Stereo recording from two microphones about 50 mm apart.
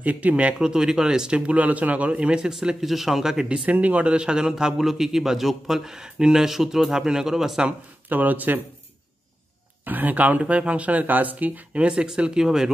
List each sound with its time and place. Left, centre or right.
0.0 s speech: right
0.6 s speech: centre
2.8 s a man's voice: centre
3.4 s a man's voice: right; by 7.6 s centre
7.6 s speech: right
9.8 s speech: right; by 12.7 s centre